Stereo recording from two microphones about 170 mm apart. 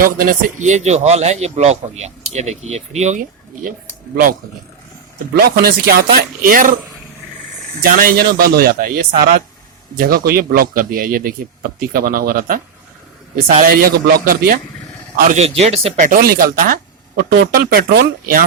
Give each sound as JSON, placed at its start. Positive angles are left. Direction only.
{"t": 0.0, "sound": "a man's voice", "side_deg": -55}
{"t": 5.3, "sound": "speech", "side_deg": -65}
{"t": 7.8, "sound": "speech", "side_deg": -55}
{"t": 15.1, "sound": "a man's voice", "side_deg": -45}
{"t": 16.0, "sound": "speech", "side_deg": -55}
{"t": 17.2, "sound": "speech", "side_deg": -70}